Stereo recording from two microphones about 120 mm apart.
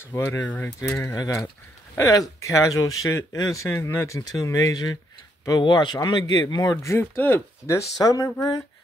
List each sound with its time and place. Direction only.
0.1 s speech: 25° left (ahead or behind)
0.4 s speech: 15° left (ahead or behind)
0.9 s speech: 25° left (ahead or behind)